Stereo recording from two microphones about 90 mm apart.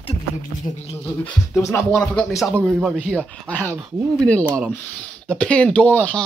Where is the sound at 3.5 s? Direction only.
20° left (ahead or behind).